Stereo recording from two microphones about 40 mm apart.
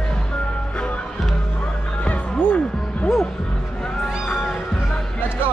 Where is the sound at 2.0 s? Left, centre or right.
Left.